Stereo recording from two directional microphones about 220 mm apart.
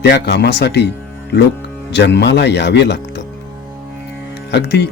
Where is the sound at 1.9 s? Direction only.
50° left (ahead or behind).